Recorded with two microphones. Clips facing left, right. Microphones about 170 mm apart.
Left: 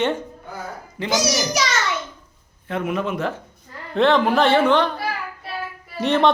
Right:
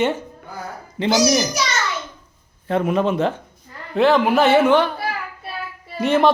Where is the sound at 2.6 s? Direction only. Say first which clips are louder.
Right 5 dB; 35° right (ahead or behind).